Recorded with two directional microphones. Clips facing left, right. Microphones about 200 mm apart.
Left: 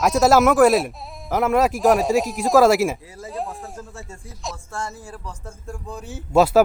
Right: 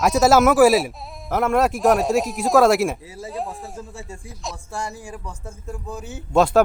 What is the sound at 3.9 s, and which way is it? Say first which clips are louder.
Speech: right 2 dB; 15° right (ahead or behind).